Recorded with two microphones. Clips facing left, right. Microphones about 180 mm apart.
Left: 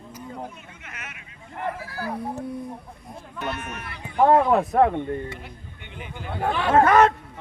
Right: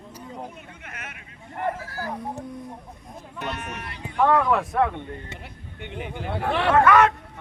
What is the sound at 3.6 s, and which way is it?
Speech, 70° right (ahead or behind).